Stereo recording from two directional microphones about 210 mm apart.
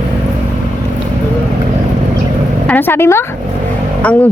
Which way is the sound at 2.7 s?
10° left (ahead or behind).